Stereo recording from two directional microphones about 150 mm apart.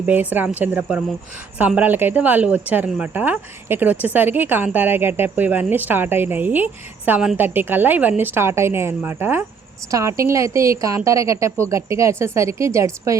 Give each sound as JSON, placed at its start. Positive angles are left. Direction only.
{"t": 0.0, "sound": "a woman's voice", "side_deg": -10}